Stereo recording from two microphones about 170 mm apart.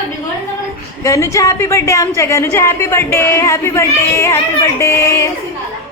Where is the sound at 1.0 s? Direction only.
20° left (ahead or behind).